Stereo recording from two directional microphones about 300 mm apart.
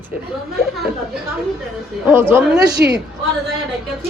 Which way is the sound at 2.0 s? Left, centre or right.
Centre.